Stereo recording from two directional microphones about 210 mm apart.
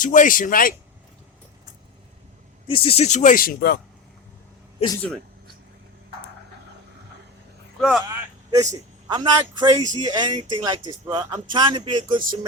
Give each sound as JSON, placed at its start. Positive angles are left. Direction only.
{"t": 0.0, "sound": "speech", "side_deg": 40}
{"t": 2.6, "sound": "speech", "side_deg": 25}
{"t": 7.8, "sound": "speech", "side_deg": 0}
{"t": 8.1, "sound": "vehicle", "side_deg": -15}
{"t": 8.7, "sound": "speech", "side_deg": -20}